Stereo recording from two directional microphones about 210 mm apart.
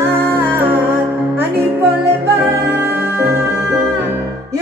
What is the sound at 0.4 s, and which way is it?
Music, 10° right (ahead or behind).